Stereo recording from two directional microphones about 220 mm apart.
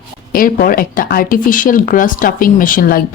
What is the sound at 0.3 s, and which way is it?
Speech, 40° left (ahead or behind).